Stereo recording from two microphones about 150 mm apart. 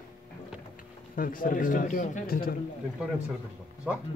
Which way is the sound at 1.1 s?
65° left (ahead or behind).